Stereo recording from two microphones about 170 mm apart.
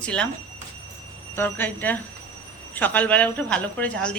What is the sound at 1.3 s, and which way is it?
A woman's voice, 10° left (ahead or behind).